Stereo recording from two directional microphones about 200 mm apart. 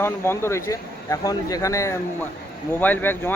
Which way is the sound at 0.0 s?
10° left (ahead or behind).